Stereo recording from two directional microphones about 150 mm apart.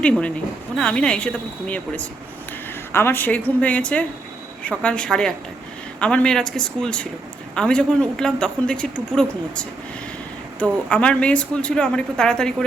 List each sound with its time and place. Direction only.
0.0 s speech: 5° left (ahead or behind)